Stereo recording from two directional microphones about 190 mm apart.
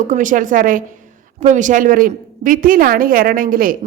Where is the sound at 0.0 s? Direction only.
45° right (ahead or behind).